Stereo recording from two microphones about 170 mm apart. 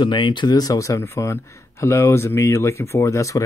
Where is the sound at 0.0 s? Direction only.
30° left (ahead or behind).